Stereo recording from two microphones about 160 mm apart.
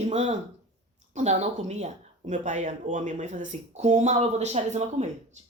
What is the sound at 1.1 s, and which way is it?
Speech, 45° right (ahead or behind).